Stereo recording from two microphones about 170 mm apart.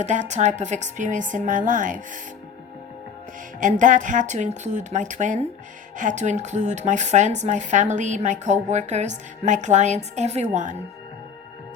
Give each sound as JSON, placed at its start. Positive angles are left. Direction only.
{"t": 0.0, "sound": "speech", "side_deg": -45}
{"t": 3.6, "sound": "speech", "side_deg": -50}